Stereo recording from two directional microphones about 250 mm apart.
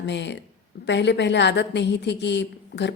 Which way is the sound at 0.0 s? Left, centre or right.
Left.